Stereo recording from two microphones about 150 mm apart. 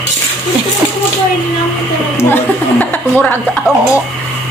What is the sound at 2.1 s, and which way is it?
Speech, 15° left (ahead or behind).